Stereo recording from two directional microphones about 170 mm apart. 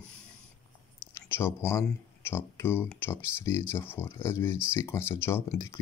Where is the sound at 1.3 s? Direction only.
15° left (ahead or behind).